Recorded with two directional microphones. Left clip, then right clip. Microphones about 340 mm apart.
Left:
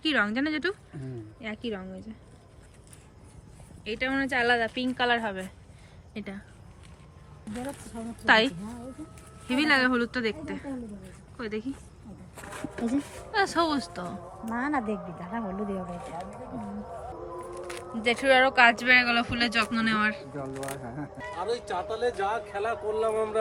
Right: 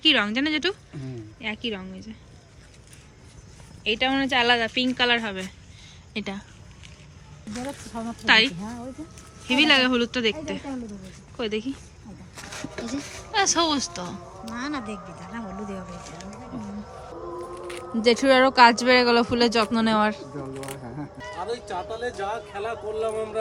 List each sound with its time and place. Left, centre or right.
0.0 s speech: centre
3.8 s speech: centre
7.5 s speech: centre
9.5 s speech: centre
14.5 s speech: left
18.0 s speech: centre